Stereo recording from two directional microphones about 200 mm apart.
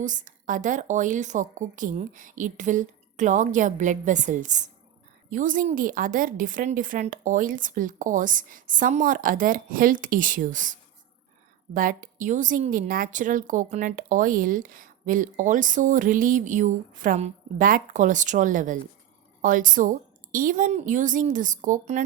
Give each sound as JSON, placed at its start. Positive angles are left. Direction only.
{"t": 0.0, "sound": "a woman's voice", "side_deg": -40}